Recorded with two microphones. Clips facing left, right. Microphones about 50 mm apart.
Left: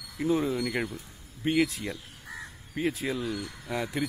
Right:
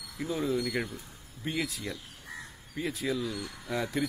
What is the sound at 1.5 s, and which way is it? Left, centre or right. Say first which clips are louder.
Speech: left 7 dB; left.